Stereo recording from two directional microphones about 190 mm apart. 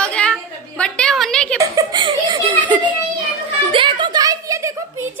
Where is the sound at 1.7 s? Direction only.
25° right (ahead or behind).